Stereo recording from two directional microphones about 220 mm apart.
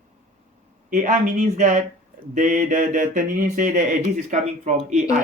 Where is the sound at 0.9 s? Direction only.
35° right (ahead or behind).